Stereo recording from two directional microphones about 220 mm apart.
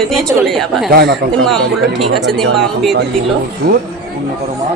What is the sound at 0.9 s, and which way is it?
Speech, 45° right (ahead or behind).